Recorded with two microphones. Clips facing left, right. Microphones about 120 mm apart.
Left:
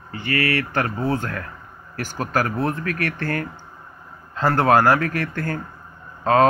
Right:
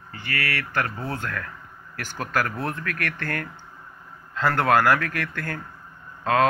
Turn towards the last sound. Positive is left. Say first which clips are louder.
# left 4 dB
turn(degrees=35)  # may be behind; listen again after turning